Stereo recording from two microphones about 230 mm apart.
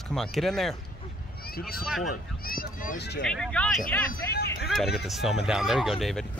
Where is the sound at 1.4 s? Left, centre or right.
Left.